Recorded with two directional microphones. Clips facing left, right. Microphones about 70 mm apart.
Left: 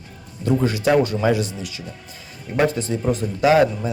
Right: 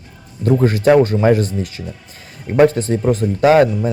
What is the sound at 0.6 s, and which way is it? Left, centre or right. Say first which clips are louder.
Speech: right 7 dB; right.